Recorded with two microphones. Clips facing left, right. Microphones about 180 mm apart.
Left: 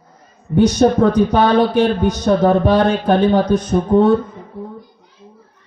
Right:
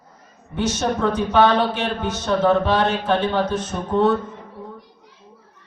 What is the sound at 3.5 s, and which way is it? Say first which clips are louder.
Speech: left 9 dB; 15° left (ahead or behind).